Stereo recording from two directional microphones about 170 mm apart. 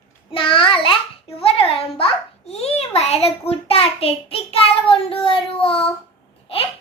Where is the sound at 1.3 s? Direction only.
35° left (ahead or behind).